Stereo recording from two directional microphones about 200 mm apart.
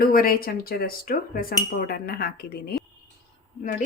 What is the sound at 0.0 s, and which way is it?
Speech, 45° left (ahead or behind).